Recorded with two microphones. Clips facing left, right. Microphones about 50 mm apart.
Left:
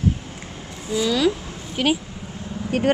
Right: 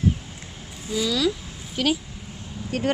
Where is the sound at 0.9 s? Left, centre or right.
Centre.